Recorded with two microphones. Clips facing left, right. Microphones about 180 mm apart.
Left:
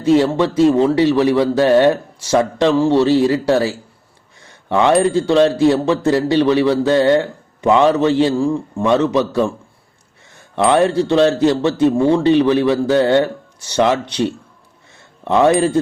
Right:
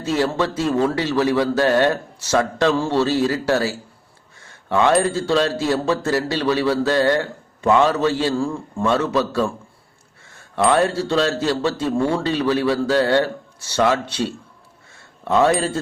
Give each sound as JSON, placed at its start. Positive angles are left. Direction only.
{"t": 0.0, "sound": "speech", "side_deg": 20}
{"t": 10.7, "sound": "speech", "side_deg": 20}